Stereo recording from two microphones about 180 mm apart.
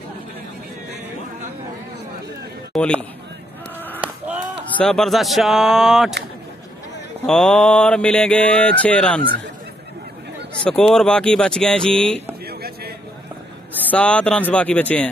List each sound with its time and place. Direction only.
2.7 s mantra: 5° left (ahead or behind)
4.7 s speech: 5° left (ahead or behind)
7.2 s mantra: 5° left (ahead or behind)
10.6 s speech: 5° left (ahead or behind)
12.4 s a sound: 60° right (ahead or behind)
13.8 s mantra: 5° left (ahead or behind)